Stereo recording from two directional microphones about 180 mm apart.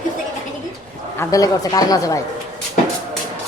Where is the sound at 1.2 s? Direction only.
20° left (ahead or behind).